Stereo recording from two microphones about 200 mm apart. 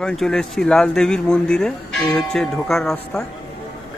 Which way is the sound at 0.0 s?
Centre (ahead or behind).